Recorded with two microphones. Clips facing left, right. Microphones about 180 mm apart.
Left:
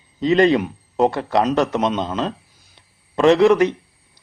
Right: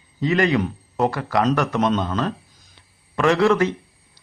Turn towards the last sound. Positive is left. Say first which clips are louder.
# left 4 dB
turn(degrees=20)  # may be behind; listen again after turning